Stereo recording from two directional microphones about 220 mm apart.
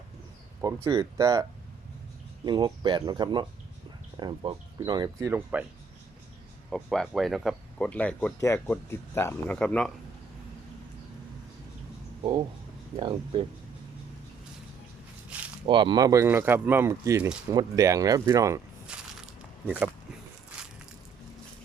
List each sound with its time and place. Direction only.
0.6 s speech: 15° right (ahead or behind)
6.7 s speech: centre (ahead or behind)
13.0 s speech: 20° right (ahead or behind)
15.6 s speech: 20° right (ahead or behind)
19.2 s a sound: 5° right (ahead or behind)